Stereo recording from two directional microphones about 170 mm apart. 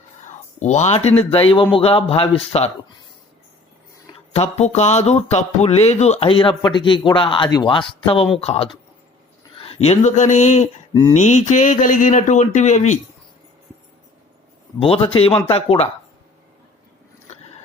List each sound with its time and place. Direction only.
0.3 s speech: 45° left (ahead or behind)
4.3 s speech: 40° left (ahead or behind)
14.8 s speech: 35° left (ahead or behind)